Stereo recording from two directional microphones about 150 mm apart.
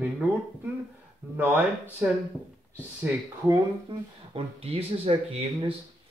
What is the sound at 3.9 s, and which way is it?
Speech, 40° right (ahead or behind).